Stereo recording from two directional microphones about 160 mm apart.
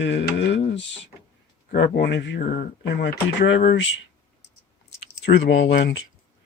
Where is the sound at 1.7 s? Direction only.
90° left.